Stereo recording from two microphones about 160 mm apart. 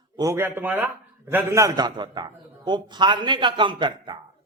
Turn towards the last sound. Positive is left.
turn(degrees=-30)  # may be behind; listen again after turning